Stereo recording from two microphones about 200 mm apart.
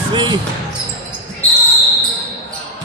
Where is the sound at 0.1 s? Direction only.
20° right (ahead or behind).